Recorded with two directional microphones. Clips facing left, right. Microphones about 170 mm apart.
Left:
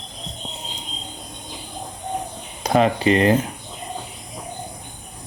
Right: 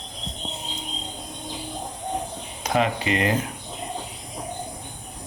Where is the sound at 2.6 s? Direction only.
35° left (ahead or behind).